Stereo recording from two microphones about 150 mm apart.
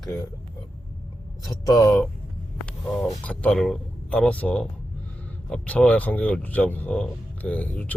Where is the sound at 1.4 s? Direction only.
25° left (ahead or behind).